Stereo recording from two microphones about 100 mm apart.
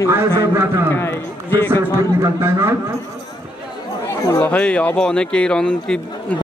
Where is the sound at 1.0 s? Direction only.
20° left (ahead or behind).